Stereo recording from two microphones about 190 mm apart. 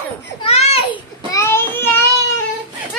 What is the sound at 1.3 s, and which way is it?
Child singing, 15° left (ahead or behind).